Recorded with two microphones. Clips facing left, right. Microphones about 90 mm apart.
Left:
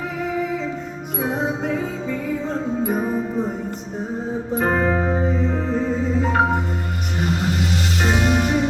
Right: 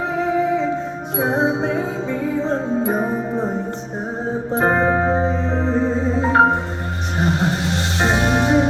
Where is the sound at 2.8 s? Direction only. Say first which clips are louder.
Right 2 dB; 25° right (ahead or behind).